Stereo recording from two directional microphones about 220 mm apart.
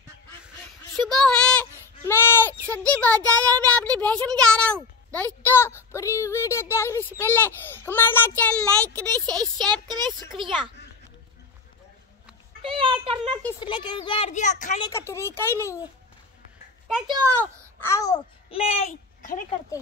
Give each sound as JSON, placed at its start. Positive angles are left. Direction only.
{"t": 0.9, "sound": "a sound", "side_deg": 0}
{"t": 3.3, "sound": "a woman's voice", "side_deg": 5}
{"t": 9.4, "sound": "speech", "side_deg": -20}
{"t": 12.6, "sound": "speech", "side_deg": -25}
{"t": 13.4, "sound": "a woman's voice", "side_deg": 15}
{"t": 14.8, "sound": "a woman's voice", "side_deg": 10}
{"t": 16.8, "sound": "speech", "side_deg": 0}
{"t": 17.7, "sound": "a child's voice", "side_deg": 10}